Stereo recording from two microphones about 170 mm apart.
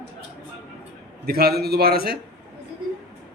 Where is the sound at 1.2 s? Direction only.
65° right (ahead or behind).